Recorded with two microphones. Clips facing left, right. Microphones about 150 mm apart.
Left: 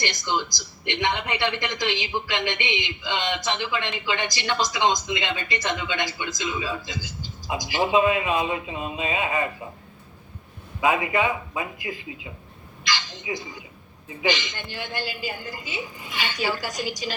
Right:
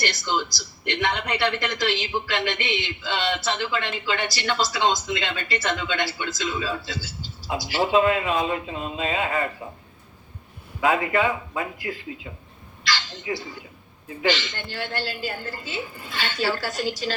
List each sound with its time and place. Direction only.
0.5 s a woman's voice: 20° left (ahead or behind)
10.8 s a woman's voice: 15° left (ahead or behind)